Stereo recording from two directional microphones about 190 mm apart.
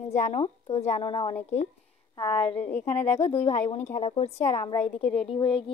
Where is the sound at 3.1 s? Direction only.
35° left (ahead or behind).